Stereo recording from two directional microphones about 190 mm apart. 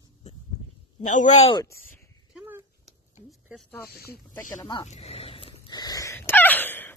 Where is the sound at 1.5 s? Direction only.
20° left (ahead or behind).